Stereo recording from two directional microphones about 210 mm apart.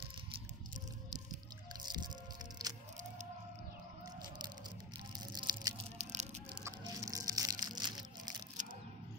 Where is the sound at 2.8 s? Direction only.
35° right (ahead or behind).